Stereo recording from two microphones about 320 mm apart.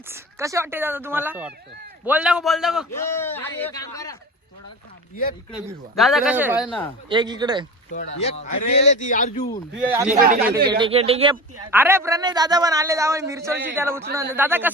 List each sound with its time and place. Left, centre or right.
0.1 s a man's voice: centre
5.5 s speech: centre
7.1 s a man's voice: centre
8.2 s speech: centre
9.7 s speech: centre
10.2 s speech: right
10.4 s a man's voice: centre
11.7 s a man's voice: centre